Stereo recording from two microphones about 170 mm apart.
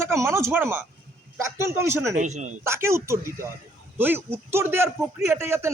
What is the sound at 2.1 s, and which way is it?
Speech, 45° right (ahead or behind).